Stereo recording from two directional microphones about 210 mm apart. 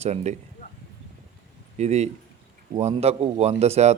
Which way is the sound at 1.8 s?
30° right (ahead or behind).